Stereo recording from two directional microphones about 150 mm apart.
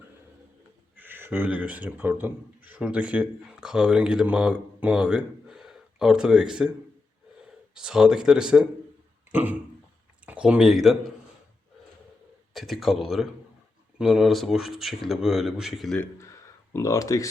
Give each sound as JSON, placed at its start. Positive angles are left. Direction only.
{"t": 0.9, "sound": "speech", "side_deg": -15}
{"t": 9.3, "sound": "a sound", "side_deg": -10}
{"t": 10.2, "sound": "speech", "side_deg": -10}
{"t": 12.5, "sound": "speech", "side_deg": 0}
{"t": 16.0, "sound": "speech", "side_deg": 15}